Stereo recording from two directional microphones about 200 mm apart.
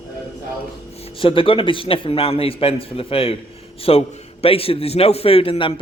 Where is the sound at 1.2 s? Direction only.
25° left (ahead or behind).